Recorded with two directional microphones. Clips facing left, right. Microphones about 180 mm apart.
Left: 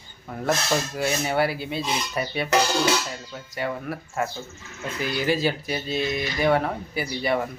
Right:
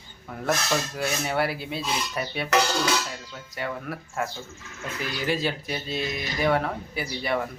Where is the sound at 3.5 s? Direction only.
Centre (ahead or behind).